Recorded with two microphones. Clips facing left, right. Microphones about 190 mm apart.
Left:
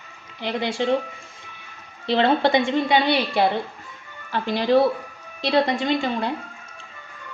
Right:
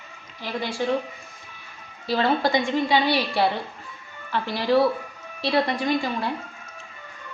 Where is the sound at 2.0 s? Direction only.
25° left (ahead or behind).